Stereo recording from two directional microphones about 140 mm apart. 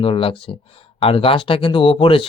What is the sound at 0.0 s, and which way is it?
Speech, 40° left (ahead or behind).